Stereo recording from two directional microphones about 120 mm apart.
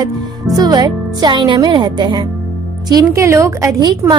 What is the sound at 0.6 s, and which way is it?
A woman's voice, 35° right (ahead or behind).